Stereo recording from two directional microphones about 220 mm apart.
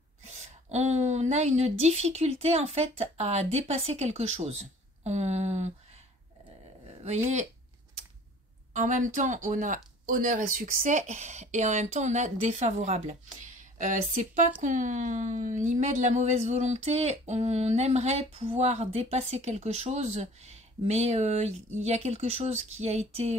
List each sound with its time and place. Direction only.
0.3 s a woman's voice: 30° right (ahead or behind)
8.7 s a woman's voice: 35° right (ahead or behind)